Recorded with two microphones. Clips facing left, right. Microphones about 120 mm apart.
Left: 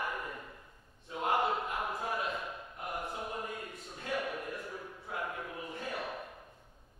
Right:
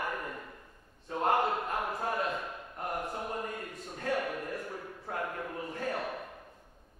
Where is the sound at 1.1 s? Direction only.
45° right (ahead or behind).